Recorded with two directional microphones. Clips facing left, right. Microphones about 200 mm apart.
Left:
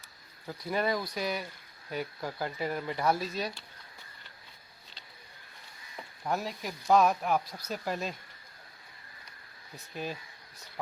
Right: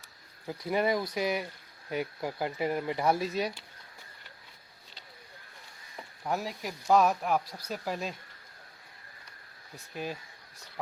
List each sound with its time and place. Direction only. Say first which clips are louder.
0.6 s speech: right 2 dB; 20° right (ahead or behind)
6.2 s speech: even; 5° right (ahead or behind)
9.7 s speech: right 1 dB; 5° right (ahead or behind)